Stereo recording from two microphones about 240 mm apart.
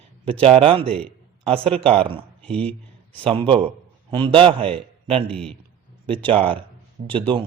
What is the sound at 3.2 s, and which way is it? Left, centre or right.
A man's voice, right.